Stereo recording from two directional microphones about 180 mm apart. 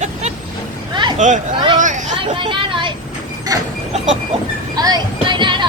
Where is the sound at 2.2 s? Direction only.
25° right (ahead or behind).